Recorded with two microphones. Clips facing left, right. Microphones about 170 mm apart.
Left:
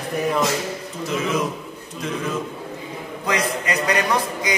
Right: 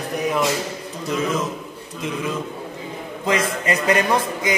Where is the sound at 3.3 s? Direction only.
25° right (ahead or behind).